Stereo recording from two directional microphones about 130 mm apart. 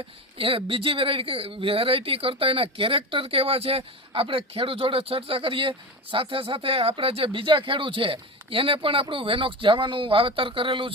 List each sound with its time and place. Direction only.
0.3 s speech: 45° right (ahead or behind)